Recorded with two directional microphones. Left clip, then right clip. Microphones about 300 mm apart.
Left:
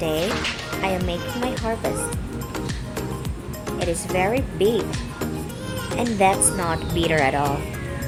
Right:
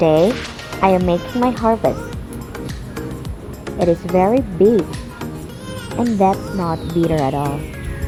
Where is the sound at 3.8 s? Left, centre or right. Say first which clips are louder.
Right 8 dB; centre.